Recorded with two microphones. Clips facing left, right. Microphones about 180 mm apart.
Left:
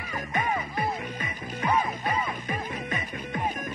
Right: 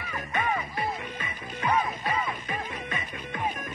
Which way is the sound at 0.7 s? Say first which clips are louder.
Left 2 dB; 40° left (ahead or behind).